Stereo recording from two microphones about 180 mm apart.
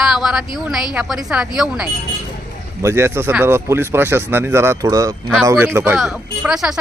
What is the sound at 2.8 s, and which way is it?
Speech, 15° right (ahead or behind).